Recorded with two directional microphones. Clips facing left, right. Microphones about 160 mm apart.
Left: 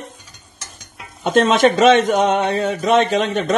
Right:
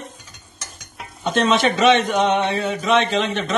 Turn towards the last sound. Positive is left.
turn(degrees=45)  # may be behind; listen again after turning